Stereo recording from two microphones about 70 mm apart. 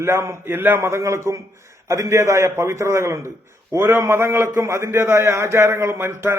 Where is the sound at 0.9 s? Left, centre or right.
Right.